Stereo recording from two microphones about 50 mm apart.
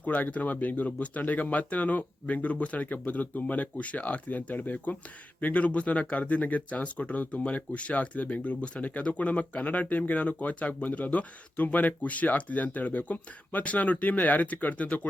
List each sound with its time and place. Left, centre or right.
0.0 s speech: left